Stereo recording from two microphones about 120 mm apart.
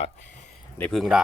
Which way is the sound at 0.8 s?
5° left (ahead or behind).